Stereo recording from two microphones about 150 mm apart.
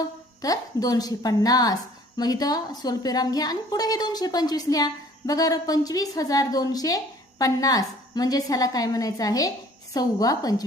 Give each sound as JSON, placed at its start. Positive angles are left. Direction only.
{"t": 0.0, "sound": "a woman's voice", "side_deg": 25}